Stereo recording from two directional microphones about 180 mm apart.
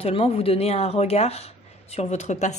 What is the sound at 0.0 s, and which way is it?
A woman's voice, 35° left (ahead or behind).